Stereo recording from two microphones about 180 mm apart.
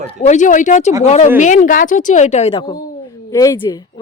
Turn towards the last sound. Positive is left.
turn(degrees=20)  # may be behind; listen again after turning